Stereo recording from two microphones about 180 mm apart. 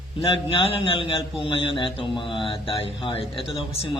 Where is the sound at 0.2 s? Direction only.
30° left (ahead or behind).